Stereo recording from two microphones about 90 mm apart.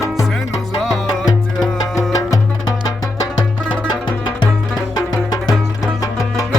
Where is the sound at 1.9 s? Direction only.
40° left (ahead or behind).